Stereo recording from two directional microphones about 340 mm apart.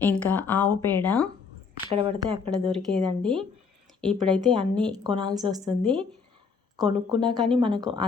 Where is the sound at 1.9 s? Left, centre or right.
Centre.